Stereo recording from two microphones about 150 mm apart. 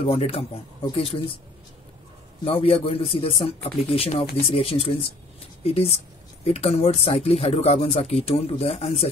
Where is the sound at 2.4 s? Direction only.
40° left (ahead or behind).